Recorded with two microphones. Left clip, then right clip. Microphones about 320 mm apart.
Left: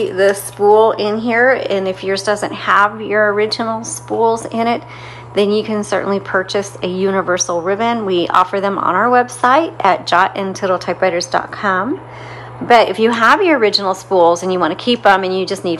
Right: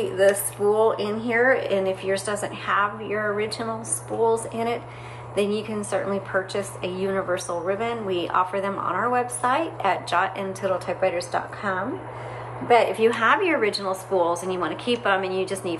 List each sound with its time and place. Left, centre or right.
0.2 s a woman's voice: left